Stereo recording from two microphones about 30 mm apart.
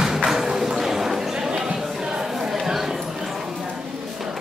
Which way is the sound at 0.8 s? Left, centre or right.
Centre.